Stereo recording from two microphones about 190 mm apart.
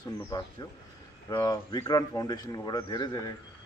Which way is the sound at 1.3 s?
20° left (ahead or behind).